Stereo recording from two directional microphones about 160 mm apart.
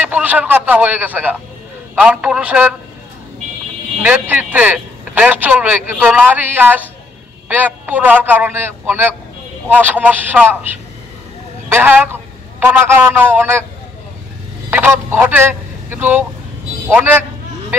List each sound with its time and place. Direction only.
0.0 s a man's voice: 10° right (ahead or behind)
4.0 s a man's voice: 10° right (ahead or behind)
11.7 s a man's voice: 10° right (ahead or behind)
14.7 s a man's voice: 15° right (ahead or behind)